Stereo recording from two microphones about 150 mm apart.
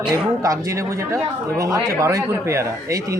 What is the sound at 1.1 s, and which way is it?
A man's voice, 20° right (ahead or behind).